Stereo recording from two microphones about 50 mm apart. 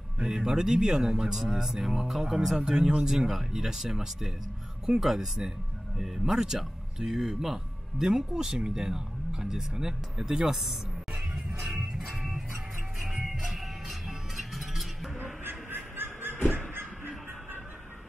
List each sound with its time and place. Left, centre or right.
0.2 s speech: centre
12.0 s music: centre
15.4 s honk: right